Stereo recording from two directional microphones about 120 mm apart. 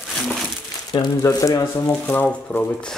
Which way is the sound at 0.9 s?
30° left (ahead or behind).